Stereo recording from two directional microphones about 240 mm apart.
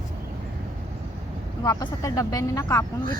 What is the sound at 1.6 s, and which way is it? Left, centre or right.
Speech, centre.